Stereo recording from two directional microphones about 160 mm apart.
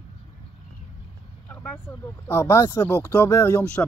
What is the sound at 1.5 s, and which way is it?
Speech, 10° left (ahead or behind).